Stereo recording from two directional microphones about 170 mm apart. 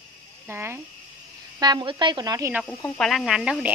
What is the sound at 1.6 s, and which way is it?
Speech, 25° right (ahead or behind).